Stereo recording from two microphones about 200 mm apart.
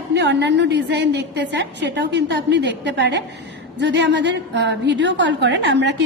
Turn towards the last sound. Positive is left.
turn(degrees=-60)  # may be behind; listen again after turning